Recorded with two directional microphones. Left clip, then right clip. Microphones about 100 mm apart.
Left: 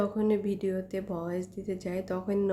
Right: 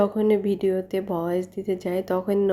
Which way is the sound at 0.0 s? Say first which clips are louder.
Right 8 dB; 25° right (ahead or behind).